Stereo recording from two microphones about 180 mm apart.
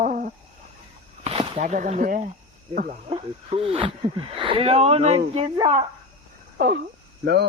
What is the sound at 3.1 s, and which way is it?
Speech, 30° right (ahead or behind).